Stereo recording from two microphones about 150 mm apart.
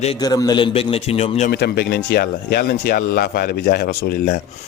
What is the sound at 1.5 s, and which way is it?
Speech, 90° left.